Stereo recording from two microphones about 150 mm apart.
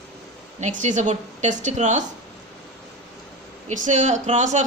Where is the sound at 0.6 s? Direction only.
50° right (ahead or behind).